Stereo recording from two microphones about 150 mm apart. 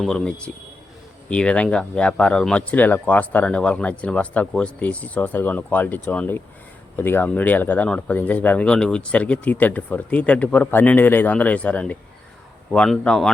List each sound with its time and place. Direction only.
0.0 s a man's voice: 5° left (ahead or behind)